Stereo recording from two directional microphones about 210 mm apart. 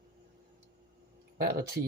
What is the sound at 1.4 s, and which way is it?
Speech, 50° right (ahead or behind).